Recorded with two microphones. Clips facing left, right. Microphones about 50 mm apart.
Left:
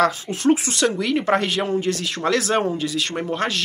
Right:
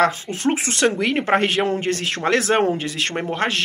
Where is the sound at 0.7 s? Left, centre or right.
Right.